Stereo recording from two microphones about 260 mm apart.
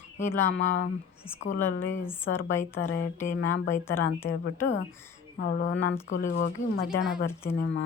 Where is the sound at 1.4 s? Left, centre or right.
Left.